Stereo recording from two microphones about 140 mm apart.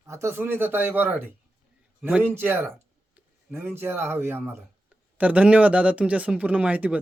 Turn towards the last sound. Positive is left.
turn(degrees=-10)  # may be behind; listen again after turning